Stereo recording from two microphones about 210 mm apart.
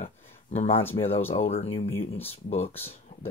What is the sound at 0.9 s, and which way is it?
Speech, 30° left (ahead or behind).